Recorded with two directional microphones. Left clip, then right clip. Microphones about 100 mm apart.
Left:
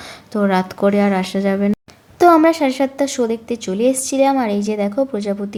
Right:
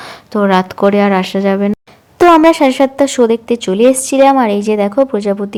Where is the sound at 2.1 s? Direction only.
45° right (ahead or behind).